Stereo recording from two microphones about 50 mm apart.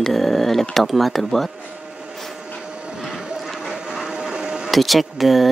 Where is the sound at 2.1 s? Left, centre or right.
Centre.